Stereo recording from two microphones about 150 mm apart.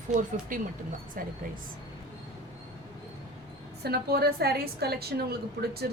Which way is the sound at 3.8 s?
90° right.